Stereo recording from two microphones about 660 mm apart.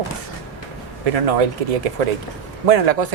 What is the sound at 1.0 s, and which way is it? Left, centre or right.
Speech, right.